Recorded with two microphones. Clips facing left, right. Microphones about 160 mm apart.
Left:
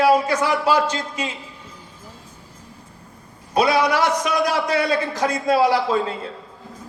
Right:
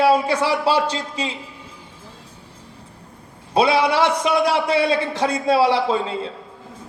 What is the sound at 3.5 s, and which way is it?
A man's voice, 30° right (ahead or behind).